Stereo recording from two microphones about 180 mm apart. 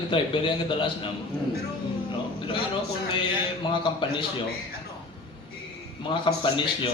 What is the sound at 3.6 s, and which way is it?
Speech, 30° left (ahead or behind).